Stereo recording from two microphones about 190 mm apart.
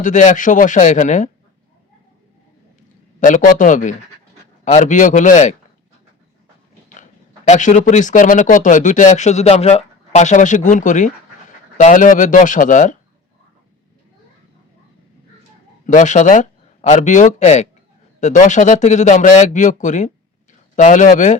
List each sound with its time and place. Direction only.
0.0 s speech: 40° left (ahead or behind)
3.2 s a man's voice: 45° left (ahead or behind)
7.4 s a man's voice: 40° left (ahead or behind)
15.9 s speech: 40° left (ahead or behind)